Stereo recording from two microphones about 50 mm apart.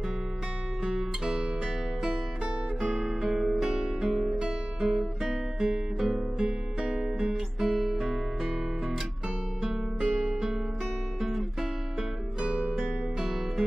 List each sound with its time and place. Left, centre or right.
0.8 s music: centre
2.0 s guitar: centre
4.0 s music: centre
4.4 s guitar: centre
6.9 s music: centre
9.9 s music: centre
11.1 s guitar: centre
12.4 s music: right
13.2 s music: centre